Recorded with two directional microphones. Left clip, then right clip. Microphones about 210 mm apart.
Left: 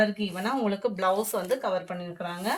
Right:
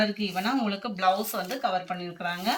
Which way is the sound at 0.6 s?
55° left (ahead or behind).